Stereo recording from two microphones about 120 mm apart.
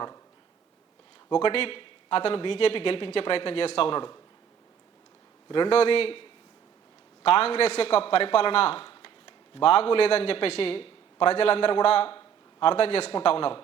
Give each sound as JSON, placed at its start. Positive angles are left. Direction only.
{"t": 1.3, "sound": "speech", "side_deg": 45}
{"t": 5.5, "sound": "speech", "side_deg": 45}
{"t": 7.3, "sound": "a man's voice", "side_deg": 55}